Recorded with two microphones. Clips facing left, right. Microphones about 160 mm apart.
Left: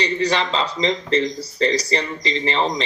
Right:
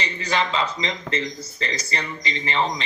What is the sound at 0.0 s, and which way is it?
A man's voice, 35° left (ahead or behind).